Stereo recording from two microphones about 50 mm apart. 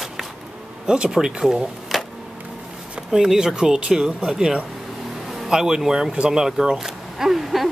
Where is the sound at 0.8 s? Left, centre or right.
Centre.